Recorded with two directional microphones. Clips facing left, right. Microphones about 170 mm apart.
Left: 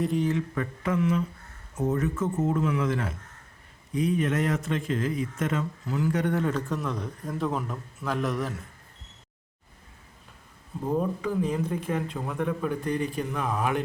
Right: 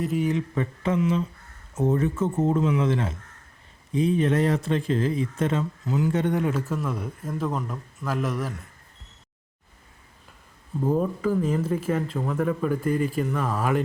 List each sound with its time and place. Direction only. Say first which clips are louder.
0.0 s speech: right 1 dB; 5° right (ahead or behind)
0.3 s a man's voice: right 2 dB; 20° right (ahead or behind); by 8.6 s centre (ahead or behind)
10.8 s speech: right 3 dB; 5° right (ahead or behind)